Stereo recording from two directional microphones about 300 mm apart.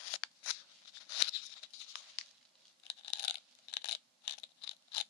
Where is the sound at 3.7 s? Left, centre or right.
Left.